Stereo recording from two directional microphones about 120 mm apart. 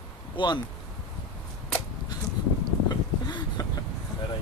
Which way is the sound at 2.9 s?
35° left (ahead or behind).